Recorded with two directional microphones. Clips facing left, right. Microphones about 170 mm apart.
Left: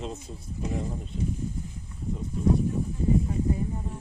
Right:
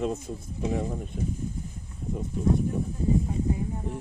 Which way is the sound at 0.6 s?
90° right.